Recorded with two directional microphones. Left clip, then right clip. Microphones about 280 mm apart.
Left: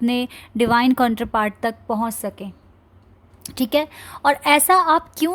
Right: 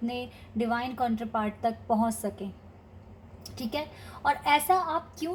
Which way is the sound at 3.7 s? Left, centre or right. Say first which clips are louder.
Left 13 dB; left.